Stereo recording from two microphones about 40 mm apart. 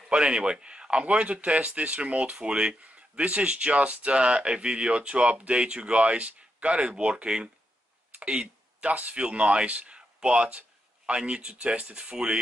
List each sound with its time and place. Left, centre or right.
0.1 s speech: right